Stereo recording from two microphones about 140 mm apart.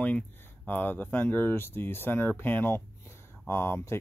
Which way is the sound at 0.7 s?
15° left (ahead or behind).